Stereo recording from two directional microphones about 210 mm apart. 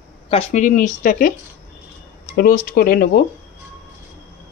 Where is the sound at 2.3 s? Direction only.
45° left (ahead or behind).